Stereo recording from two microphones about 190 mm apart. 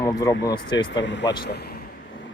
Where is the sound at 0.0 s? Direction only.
20° left (ahead or behind).